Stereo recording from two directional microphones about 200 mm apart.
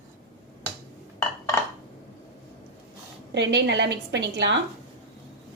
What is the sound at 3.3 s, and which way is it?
A woman's voice, 60° right (ahead or behind).